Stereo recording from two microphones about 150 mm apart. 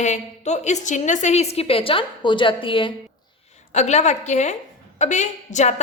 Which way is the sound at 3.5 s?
50° left (ahead or behind).